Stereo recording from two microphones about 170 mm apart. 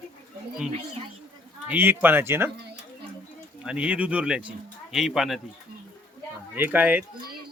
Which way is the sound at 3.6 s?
5° right (ahead or behind).